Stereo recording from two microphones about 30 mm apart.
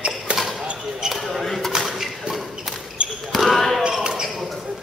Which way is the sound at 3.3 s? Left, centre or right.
Centre.